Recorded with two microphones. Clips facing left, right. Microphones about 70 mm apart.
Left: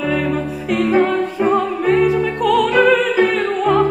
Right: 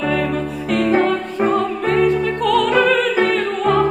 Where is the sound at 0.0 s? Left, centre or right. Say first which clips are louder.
Left 1 dB; centre.